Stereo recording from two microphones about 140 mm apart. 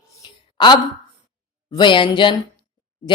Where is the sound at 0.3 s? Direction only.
35° left (ahead or behind).